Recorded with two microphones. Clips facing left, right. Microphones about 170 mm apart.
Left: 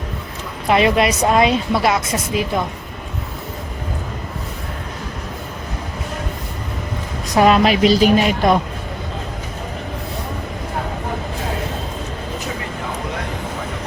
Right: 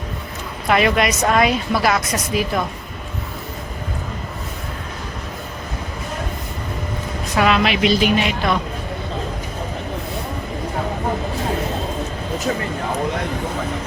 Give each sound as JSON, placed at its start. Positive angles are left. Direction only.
{"t": 0.7, "sound": "a woman's voice", "side_deg": 25}
{"t": 7.3, "sound": "a woman's voice", "side_deg": 40}